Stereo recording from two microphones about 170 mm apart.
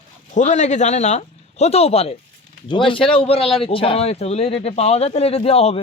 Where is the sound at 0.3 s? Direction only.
45° left (ahead or behind).